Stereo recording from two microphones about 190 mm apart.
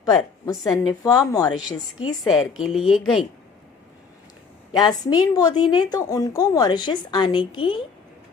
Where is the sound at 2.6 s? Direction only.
Centre (ahead or behind).